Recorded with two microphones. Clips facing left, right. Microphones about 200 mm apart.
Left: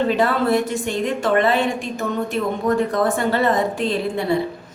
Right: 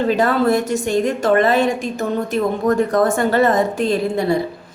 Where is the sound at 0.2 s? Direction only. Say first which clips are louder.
Right 2 dB; 45° right (ahead or behind).